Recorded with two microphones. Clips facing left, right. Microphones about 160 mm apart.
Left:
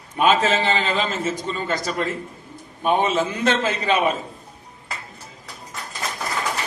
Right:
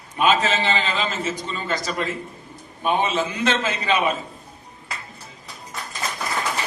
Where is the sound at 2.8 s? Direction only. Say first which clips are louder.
Left 2 dB; 50° left (ahead or behind).